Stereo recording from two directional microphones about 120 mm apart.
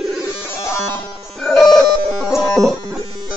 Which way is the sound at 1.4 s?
Centre (ahead or behind).